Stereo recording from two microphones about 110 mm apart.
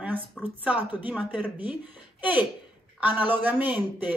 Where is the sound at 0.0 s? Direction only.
15° right (ahead or behind).